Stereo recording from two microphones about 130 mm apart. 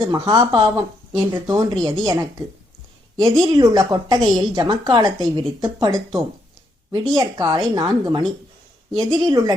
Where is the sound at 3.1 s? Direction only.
30° right (ahead or behind).